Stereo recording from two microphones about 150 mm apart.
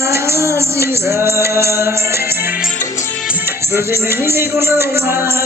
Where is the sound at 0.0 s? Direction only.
15° right (ahead or behind).